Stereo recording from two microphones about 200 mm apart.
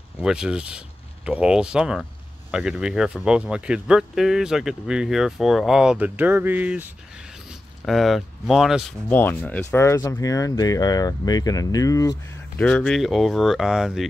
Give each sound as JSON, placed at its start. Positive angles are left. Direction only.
{"t": 0.2, "sound": "speech", "side_deg": -5}
{"t": 9.1, "sound": "speech", "side_deg": 10}